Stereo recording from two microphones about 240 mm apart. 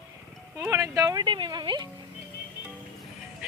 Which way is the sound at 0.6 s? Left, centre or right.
Centre.